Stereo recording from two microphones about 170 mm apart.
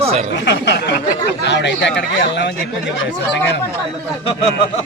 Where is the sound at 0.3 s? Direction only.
90° left.